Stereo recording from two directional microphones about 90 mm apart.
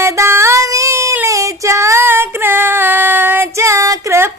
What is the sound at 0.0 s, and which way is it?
Music, 30° right (ahead or behind).